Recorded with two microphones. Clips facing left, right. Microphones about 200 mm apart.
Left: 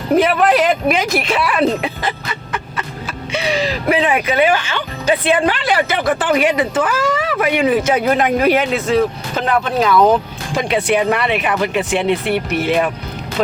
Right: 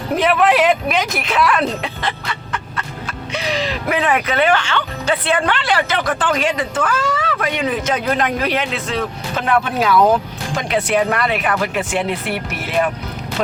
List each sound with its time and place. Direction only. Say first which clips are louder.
0.2 s speech: right 1 dB; centre (ahead or behind)
8.4 s speech: left 6 dB; 50° left (ahead or behind)
9.3 s speech: left 1 dB; 5° right (ahead or behind)